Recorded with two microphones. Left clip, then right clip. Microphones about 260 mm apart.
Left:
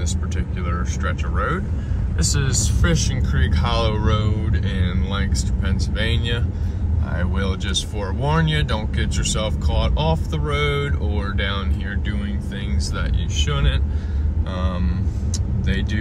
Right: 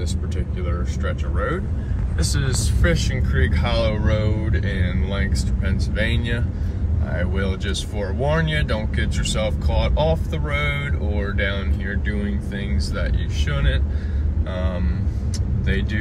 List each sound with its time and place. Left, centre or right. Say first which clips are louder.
0.7 s speech: left 3 dB; centre
2.6 s speech: even; centre